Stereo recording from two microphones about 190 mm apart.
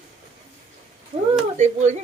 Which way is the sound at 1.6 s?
40° right (ahead or behind).